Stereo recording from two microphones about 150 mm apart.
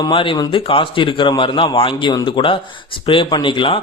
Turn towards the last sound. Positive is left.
turn(degrees=35)  # may be behind; listen again after turning